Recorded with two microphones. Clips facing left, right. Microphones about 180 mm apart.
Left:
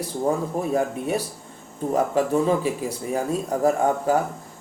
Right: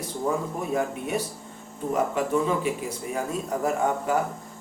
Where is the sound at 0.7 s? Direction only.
35° left (ahead or behind).